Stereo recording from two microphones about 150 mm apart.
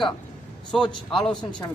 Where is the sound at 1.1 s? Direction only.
Centre (ahead or behind).